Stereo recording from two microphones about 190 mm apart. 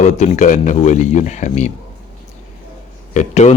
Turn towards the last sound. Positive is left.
turn(degrees=40)  # may be behind; listen again after turning